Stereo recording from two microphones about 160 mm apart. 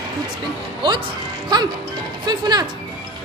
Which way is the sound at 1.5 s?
25° right (ahead or behind).